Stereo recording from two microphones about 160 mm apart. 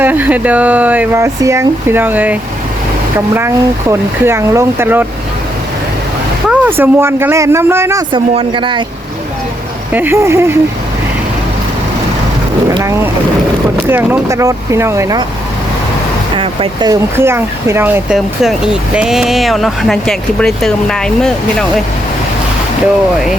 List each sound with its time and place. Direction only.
0.0 s speech: 10° right (ahead or behind)
6.5 s speech: 10° right (ahead or behind)
8.1 s a man's voice: 30° right (ahead or behind)
9.9 s speech: 15° right (ahead or behind)
13.8 s speech: 15° right (ahead or behind)
16.4 s a man's voice: 35° right (ahead or behind)
16.9 s speech: 15° right (ahead or behind); by 21.3 s 5° left (ahead or behind)